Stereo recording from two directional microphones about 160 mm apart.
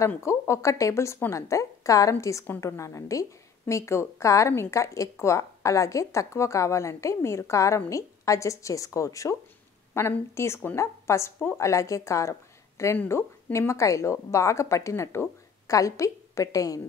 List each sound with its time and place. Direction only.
0.0 s a woman's voice: 15° left (ahead or behind)